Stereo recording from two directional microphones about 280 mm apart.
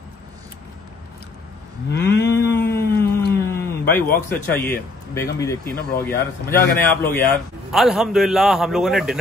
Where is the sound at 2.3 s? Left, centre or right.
Centre.